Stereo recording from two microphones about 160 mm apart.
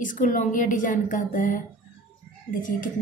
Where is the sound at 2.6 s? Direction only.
55° left (ahead or behind).